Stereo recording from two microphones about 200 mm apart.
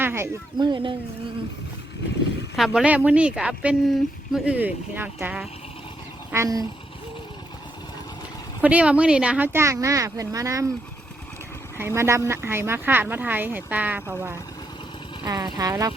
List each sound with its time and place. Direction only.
0.0 s speech: 10° right (ahead or behind)
0.7 s speech: 25° right (ahead or behind)
2.6 s speech: centre (ahead or behind)
8.6 s speech: 5° right (ahead or behind)
11.8 s speech: 15° right (ahead or behind)
15.5 s speech: 15° right (ahead or behind)